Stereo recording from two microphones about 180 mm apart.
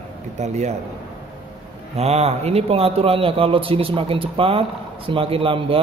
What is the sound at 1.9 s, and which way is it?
A man's voice, 35° right (ahead or behind).